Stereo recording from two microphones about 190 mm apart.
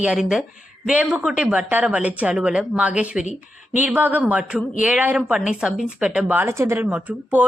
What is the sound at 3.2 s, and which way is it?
Speech, 40° left (ahead or behind).